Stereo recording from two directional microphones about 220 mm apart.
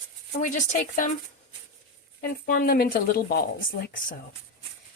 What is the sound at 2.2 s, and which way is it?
Speech, 40° left (ahead or behind).